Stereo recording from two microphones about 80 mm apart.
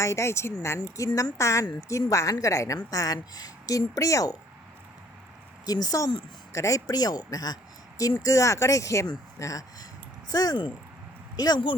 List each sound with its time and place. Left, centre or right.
0.0 s speech: left
0.8 s speech: left
5.6 s speech: left
6.5 s speech: left